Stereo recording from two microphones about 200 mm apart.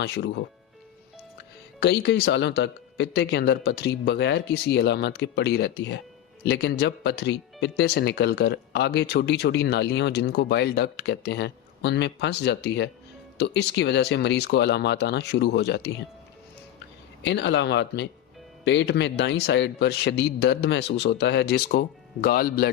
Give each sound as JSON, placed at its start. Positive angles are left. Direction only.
{"t": 0.0, "sound": "speech", "side_deg": 60}
{"t": 1.8, "sound": "speech", "side_deg": 55}
{"t": 17.2, "sound": "speech", "side_deg": 60}